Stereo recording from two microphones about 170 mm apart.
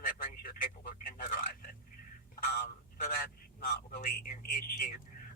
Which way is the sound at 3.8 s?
55° left (ahead or behind).